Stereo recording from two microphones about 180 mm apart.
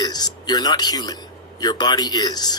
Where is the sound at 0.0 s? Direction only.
20° left (ahead or behind).